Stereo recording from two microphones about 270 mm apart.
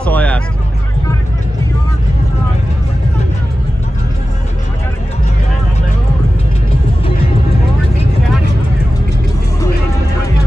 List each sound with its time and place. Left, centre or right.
0.0 s vehicle: centre